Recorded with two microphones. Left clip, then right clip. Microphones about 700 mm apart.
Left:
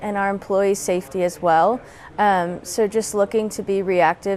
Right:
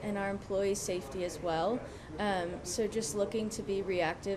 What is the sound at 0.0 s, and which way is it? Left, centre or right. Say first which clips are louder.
A woman's voice: left 14 dB; left.